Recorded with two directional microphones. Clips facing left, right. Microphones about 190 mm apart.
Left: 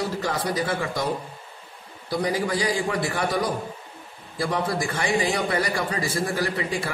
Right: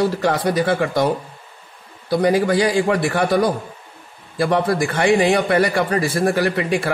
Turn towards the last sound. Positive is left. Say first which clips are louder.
# right 7 dB
turn(degrees=-70)  # may be behind; listen again after turning